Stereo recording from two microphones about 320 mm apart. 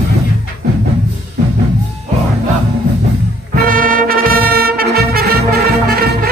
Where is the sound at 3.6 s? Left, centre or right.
Right.